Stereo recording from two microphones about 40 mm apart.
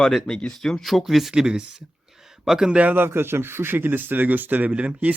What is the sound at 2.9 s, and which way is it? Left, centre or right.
Speech, right.